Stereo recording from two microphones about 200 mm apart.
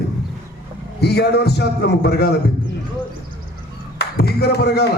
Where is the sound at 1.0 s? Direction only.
55° left (ahead or behind).